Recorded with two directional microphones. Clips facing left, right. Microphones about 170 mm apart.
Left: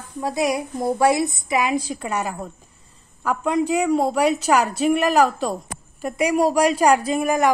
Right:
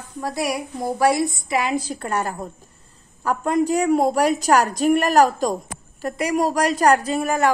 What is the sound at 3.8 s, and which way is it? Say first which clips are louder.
Speech: right 2 dB; centre (ahead or behind).